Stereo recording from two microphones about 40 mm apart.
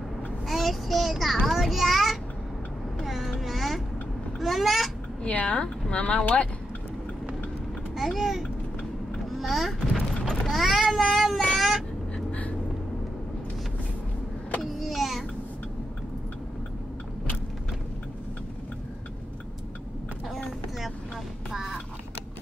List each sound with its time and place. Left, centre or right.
0.5 s child singing: centre
3.0 s a sound: centre
5.3 s speech: left
7.9 s a child's voice: centre
10.1 s a sound: centre
10.5 s a child's voice: centre
11.5 s vehicle: centre
12.3 s vehicle: left
14.6 s power windows: centre